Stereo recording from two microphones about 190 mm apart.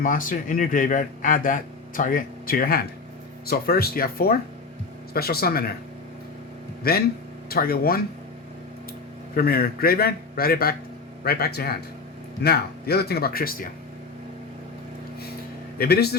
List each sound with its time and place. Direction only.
0.0 s speech: 45° left (ahead or behind)
6.8 s speech: 55° left (ahead or behind)
9.3 s speech: 55° left (ahead or behind)
15.8 s speech: 55° left (ahead or behind)